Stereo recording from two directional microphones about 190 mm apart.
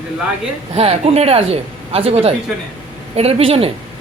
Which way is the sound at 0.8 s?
35° right (ahead or behind).